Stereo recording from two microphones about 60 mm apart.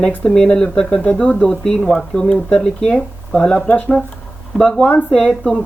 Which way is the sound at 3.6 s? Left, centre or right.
Left.